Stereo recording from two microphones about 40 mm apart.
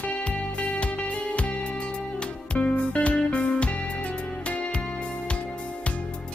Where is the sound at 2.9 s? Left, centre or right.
Left.